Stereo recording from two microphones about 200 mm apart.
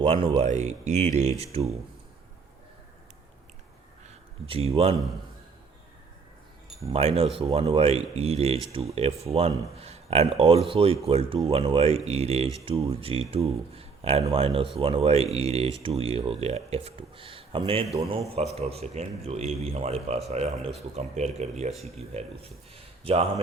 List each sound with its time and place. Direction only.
0.0 s speech: 30° right (ahead or behind)
4.4 s speech: 30° right (ahead or behind)
6.8 s speech: 30° right (ahead or behind)
17.8 s a man's voice: centre (ahead or behind)
18.3 s speech: 30° right (ahead or behind)